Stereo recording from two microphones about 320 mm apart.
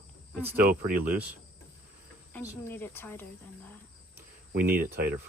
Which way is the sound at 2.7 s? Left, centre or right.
Centre.